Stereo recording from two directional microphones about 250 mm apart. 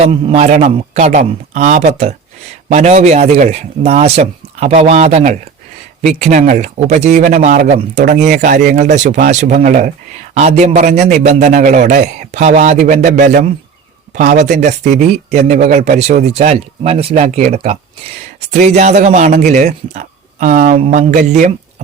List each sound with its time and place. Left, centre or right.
0.0 s a man's voice: right